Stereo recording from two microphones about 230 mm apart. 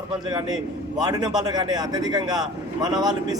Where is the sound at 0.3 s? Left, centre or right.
Centre.